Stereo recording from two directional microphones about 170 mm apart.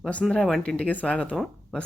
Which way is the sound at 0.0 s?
5° left (ahead or behind).